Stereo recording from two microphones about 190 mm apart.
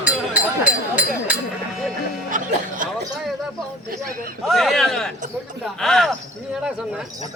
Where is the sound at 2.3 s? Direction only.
45° right (ahead or behind).